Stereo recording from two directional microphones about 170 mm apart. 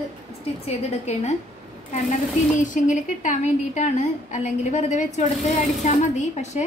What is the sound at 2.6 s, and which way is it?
A woman's voice, 50° left (ahead or behind).